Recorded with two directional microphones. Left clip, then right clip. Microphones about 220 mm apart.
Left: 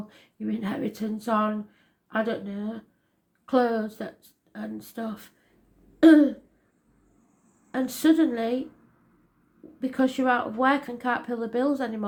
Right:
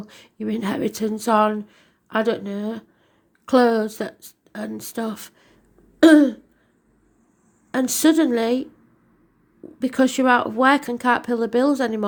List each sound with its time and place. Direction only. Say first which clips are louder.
0.1 s speech: right 7 dB; 45° right (ahead or behind)
7.7 s speech: right 5 dB; 45° right (ahead or behind)
9.8 s speech: right 6 dB; 45° right (ahead or behind)